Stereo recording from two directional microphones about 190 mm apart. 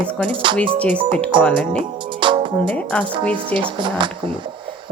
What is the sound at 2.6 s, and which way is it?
Speech, 5° left (ahead or behind).